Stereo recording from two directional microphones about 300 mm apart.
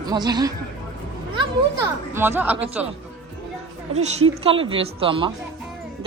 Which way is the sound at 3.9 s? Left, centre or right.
Right.